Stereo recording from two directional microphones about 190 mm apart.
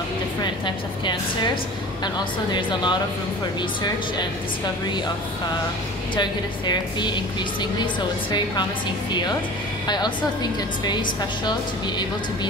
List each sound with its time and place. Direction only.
0.4 s a woman's voice: 25° left (ahead or behind)
2.5 s a woman's voice: 25° left (ahead or behind)
6.1 s a woman's voice: 25° left (ahead or behind)
9.8 s a woman's voice: 20° left (ahead or behind)